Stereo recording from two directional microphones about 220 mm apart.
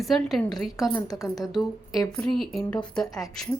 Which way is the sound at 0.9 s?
15° left (ahead or behind).